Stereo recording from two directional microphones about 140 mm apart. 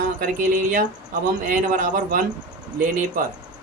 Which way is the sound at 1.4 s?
75° right (ahead or behind).